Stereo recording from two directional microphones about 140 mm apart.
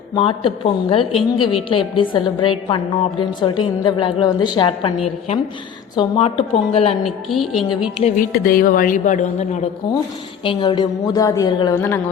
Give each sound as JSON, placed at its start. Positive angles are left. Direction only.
{"t": 0.1, "sound": "a woman's voice", "side_deg": 40}
{"t": 7.0, "sound": "speech", "side_deg": 0}
{"t": 8.0, "sound": "a woman's voice", "side_deg": 70}
{"t": 10.4, "sound": "a woman's voice", "side_deg": 35}